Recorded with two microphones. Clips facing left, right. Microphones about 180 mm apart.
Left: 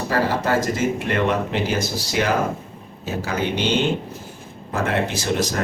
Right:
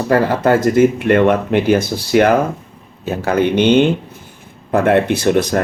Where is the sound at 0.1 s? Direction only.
55° right (ahead or behind).